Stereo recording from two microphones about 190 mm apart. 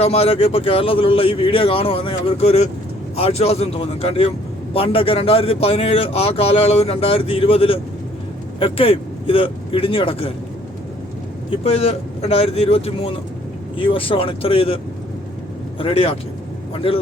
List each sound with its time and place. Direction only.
0.0 s a man's voice: 30° left (ahead or behind)
11.6 s speech: 30° left (ahead or behind)
15.8 s speech: 30° left (ahead or behind)